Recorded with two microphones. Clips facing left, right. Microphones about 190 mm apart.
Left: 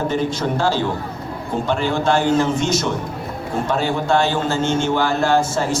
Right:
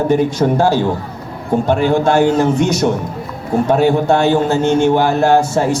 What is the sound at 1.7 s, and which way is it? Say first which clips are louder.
A man's voice: right 5 dB; 55° right (ahead or behind).